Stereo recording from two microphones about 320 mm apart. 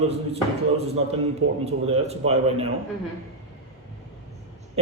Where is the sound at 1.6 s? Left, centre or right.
Centre.